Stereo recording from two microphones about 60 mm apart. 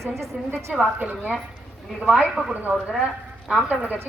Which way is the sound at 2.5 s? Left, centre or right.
Right.